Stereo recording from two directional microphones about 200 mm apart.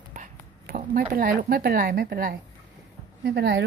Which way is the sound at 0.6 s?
45° right (ahead or behind).